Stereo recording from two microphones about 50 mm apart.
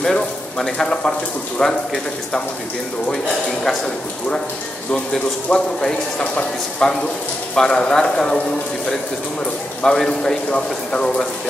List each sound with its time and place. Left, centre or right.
0.0 s speech: centre
3.6 s speech: centre
5.5 s speech: centre
9.8 s speech: centre
10.5 s speech: left